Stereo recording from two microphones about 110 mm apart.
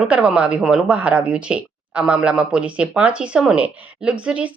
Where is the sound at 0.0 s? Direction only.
10° right (ahead or behind).